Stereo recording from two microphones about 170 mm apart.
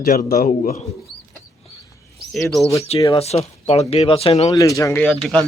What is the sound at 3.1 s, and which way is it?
Speech, 35° left (ahead or behind).